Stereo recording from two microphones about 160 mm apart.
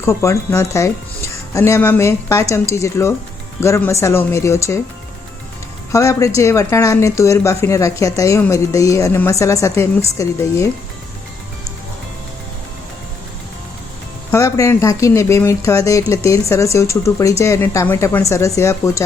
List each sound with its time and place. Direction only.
0.0 s speech: 20° left (ahead or behind)
5.9 s speech: 20° left (ahead or behind)
14.3 s speech: 20° left (ahead or behind)